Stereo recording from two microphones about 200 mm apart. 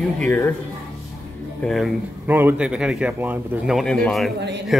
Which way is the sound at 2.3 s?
10° right (ahead or behind).